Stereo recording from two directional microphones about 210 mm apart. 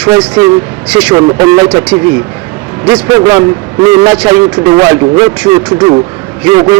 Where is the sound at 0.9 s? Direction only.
5° right (ahead or behind).